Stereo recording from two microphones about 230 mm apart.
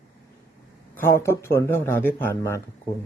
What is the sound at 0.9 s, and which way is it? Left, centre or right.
Speech, centre.